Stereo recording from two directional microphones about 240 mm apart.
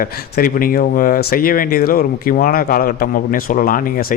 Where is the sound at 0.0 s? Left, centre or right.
Left.